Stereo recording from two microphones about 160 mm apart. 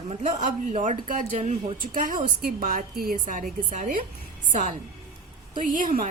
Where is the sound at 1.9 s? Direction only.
55° right (ahead or behind).